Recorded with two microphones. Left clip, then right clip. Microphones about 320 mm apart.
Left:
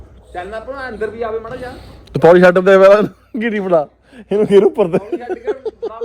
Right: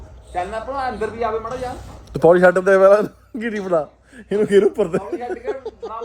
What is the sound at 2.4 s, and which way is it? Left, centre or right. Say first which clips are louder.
A man's voice: left 4 dB; left.